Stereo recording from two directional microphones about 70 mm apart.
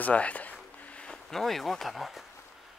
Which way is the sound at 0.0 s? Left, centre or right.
Left.